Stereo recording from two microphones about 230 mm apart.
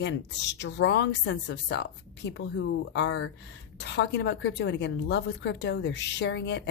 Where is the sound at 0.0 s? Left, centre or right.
Left.